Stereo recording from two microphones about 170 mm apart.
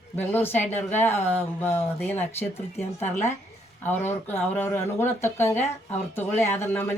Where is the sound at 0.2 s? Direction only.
10° left (ahead or behind).